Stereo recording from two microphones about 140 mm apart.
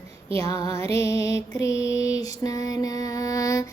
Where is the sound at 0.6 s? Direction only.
45° right (ahead or behind).